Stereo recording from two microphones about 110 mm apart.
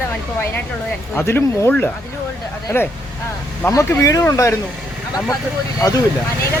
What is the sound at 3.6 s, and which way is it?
Speech, 25° left (ahead or behind).